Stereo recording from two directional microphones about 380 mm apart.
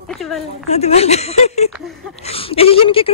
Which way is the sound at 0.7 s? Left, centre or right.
Centre.